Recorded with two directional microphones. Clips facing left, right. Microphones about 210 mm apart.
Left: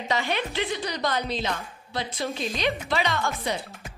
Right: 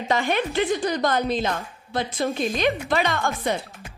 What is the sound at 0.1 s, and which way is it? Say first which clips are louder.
Speech: right 5 dB; 50° right (ahead or behind).